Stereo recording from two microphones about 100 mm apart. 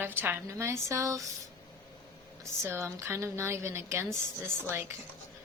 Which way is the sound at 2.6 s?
25° right (ahead or behind).